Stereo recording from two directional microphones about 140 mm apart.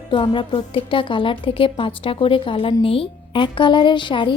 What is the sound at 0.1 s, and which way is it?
A woman's voice, 35° left (ahead or behind).